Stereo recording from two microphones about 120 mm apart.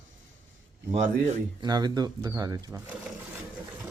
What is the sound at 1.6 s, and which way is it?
Speech, 35° right (ahead or behind).